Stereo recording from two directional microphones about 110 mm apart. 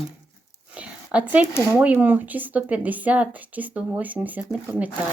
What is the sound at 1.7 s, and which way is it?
Speech, 15° right (ahead or behind).